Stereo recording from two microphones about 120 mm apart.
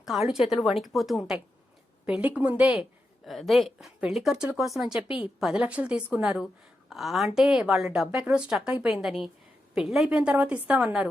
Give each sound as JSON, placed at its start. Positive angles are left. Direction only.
{"t": 0.0, "sound": "a woman's voice", "side_deg": -5}
{"t": 3.2, "sound": "a woman's voice", "side_deg": 0}